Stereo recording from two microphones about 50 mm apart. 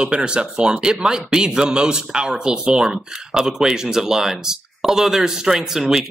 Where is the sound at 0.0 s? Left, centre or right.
Centre.